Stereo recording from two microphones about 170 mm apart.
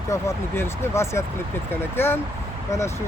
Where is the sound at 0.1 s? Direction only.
15° left (ahead or behind).